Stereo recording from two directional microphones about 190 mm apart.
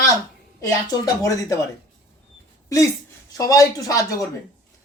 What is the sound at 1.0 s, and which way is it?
Speech, 15° left (ahead or behind).